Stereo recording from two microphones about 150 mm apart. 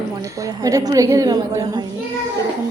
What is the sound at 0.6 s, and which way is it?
A woman's voice, 25° right (ahead or behind).